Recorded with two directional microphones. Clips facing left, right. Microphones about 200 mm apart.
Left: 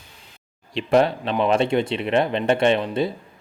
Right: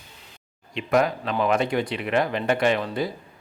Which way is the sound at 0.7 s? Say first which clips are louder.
Left 4 dB; 30° left (ahead or behind).